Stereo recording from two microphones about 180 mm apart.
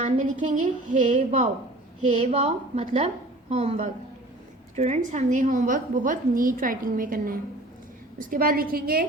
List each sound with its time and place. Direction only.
0.0 s a woman's voice: 45° right (ahead or behind)